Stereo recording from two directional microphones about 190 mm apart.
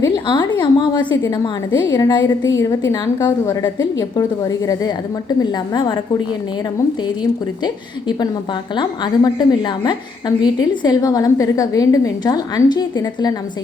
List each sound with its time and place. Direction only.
0.0 s a woman's voice: 20° left (ahead or behind)
7.6 s a woman's voice: 20° left (ahead or behind)